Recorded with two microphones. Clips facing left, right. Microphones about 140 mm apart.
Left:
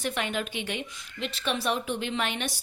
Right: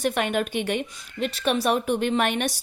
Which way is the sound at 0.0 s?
55° right (ahead or behind).